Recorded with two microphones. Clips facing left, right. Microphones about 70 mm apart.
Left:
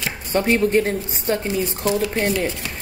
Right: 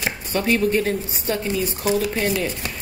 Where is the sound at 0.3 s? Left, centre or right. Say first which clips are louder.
Left 2 dB; left.